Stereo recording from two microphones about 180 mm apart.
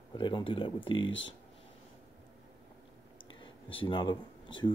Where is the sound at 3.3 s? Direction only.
30° left (ahead or behind).